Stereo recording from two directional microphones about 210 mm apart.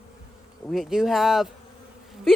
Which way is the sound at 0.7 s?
Centre (ahead or behind).